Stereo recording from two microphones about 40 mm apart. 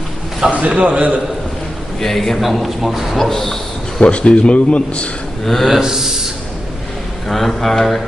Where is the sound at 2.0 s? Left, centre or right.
Centre.